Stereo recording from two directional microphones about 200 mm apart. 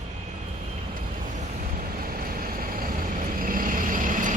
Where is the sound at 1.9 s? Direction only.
45° right (ahead or behind).